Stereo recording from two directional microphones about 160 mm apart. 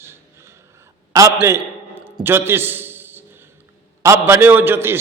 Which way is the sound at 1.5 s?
15° right (ahead or behind).